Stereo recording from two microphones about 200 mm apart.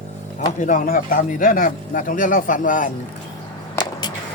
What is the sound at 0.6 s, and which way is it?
Speech, 40° left (ahead or behind).